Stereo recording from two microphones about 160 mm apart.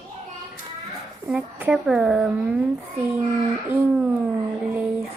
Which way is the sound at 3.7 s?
10° right (ahead or behind).